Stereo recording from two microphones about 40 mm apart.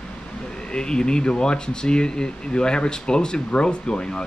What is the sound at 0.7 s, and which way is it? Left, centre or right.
Speech, left.